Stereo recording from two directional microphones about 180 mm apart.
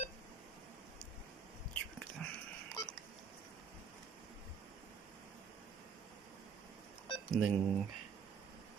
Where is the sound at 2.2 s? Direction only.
5° left (ahead or behind).